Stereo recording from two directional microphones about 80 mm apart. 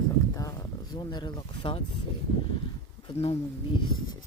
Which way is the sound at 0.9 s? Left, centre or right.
Left.